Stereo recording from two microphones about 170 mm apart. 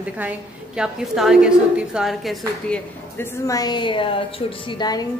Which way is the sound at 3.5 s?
25° left (ahead or behind).